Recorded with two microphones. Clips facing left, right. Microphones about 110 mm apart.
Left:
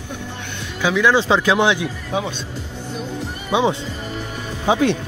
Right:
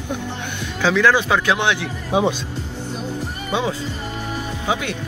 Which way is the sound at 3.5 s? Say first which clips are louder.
Left 5 dB; 15° left (ahead or behind).